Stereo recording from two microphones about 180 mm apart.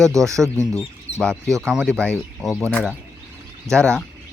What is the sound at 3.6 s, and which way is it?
Speech, 15° right (ahead or behind).